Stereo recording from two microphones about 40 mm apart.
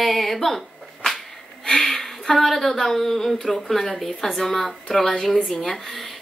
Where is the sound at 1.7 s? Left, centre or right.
Centre.